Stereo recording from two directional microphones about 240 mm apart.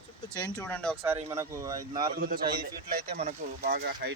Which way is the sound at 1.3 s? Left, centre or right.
Centre.